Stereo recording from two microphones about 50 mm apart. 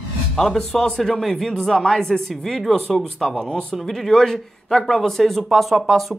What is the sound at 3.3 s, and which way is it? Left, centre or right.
Speech, centre.